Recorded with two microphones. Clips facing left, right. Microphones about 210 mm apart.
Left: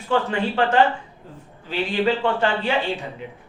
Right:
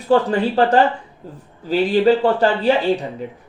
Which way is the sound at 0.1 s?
35° right (ahead or behind).